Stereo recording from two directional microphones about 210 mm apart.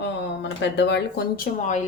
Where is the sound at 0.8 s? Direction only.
55° left (ahead or behind); by 1.8 s 35° left (ahead or behind).